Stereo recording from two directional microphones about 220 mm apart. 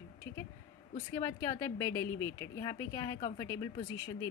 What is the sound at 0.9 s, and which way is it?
A woman's voice, 15° left (ahead or behind).